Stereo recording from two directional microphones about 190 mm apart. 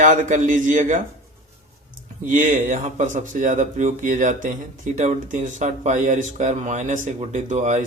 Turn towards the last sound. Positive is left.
turn(degrees=-40)  # may be behind; listen again after turning